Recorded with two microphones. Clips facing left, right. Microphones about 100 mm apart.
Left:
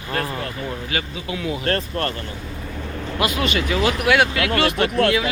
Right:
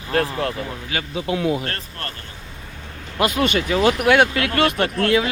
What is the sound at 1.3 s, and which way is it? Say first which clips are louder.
Speech: right 7 dB; 50° right (ahead or behind).